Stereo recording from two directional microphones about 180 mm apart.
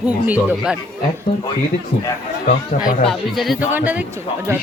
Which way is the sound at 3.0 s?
Centre (ahead or behind).